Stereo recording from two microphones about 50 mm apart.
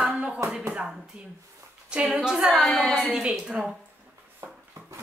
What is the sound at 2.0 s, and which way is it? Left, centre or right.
A woman's voice, centre.